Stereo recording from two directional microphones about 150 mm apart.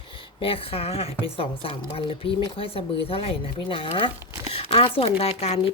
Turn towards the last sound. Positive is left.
turn(degrees=40)  # may be behind; listen again after turning